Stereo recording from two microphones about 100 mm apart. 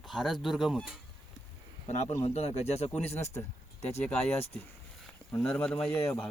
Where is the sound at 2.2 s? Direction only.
90° left.